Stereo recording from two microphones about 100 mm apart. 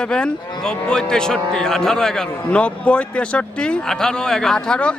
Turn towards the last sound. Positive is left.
turn(degrees=10)  # may be behind; listen again after turning